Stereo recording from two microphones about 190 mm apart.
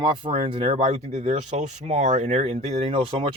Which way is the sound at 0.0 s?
30° right (ahead or behind).